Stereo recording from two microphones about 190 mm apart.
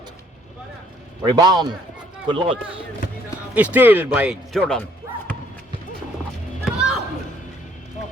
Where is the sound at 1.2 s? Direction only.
20° right (ahead or behind).